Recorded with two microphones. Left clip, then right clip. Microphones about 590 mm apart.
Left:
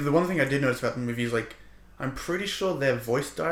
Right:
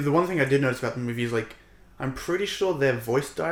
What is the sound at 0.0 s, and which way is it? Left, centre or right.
Speech, right.